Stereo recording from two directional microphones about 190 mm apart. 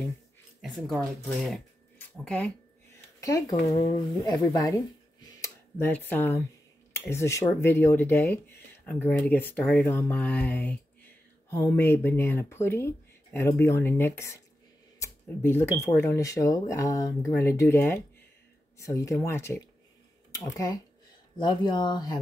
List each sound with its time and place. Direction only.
0.6 s speech: centre (ahead or behind); by 4.7 s 20° left (ahead or behind)
5.2 s a sound: 20° left (ahead or behind)
7.1 s speech: 15° left (ahead or behind)